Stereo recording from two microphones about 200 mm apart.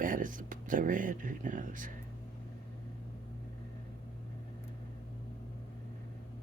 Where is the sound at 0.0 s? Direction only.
40° right (ahead or behind).